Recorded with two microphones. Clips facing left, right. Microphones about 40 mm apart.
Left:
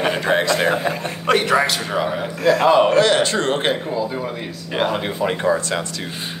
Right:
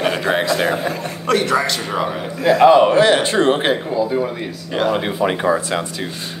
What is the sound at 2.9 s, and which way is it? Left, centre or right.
A man's voice, centre.